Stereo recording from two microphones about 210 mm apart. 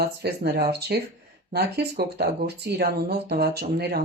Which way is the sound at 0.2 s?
50° right (ahead or behind).